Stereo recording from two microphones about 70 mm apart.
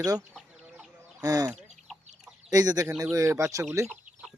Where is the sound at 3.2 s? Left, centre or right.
Right.